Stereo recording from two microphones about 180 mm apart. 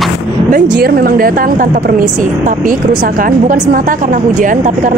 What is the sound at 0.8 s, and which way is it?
A woman's voice, 55° right (ahead or behind).